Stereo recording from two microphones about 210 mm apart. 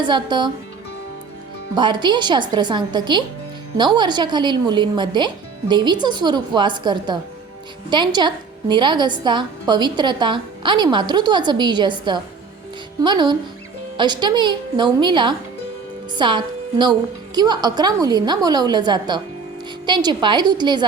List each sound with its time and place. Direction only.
0.0 s a woman's voice: 20° right (ahead or behind)
1.7 s a woman's voice: 20° right (ahead or behind)